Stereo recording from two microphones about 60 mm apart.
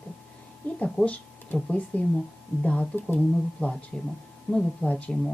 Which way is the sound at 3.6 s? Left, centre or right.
Centre.